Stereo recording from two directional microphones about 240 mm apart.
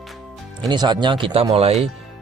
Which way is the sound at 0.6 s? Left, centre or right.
Centre.